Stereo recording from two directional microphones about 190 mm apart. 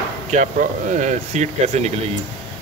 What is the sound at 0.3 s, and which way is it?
Speech, 40° right (ahead or behind).